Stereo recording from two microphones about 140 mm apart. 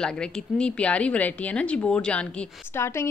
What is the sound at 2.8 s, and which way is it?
Speech, 20° left (ahead or behind).